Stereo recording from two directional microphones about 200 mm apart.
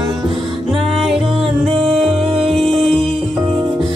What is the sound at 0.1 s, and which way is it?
Music, centre (ahead or behind).